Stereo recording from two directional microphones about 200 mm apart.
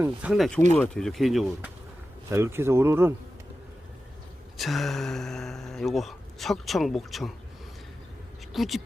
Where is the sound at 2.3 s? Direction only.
10° right (ahead or behind).